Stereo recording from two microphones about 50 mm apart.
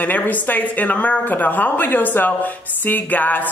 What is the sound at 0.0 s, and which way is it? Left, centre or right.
A woman's voice, left.